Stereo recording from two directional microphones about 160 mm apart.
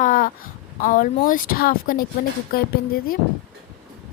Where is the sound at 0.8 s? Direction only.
60° left (ahead or behind).